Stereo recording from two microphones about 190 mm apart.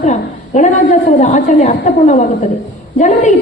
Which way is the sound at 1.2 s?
40° left (ahead or behind).